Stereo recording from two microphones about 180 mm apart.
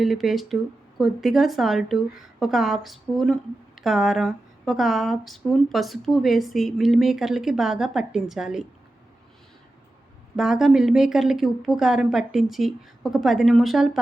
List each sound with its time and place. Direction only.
0.0 s speech: centre (ahead or behind)
10.3 s speech: centre (ahead or behind)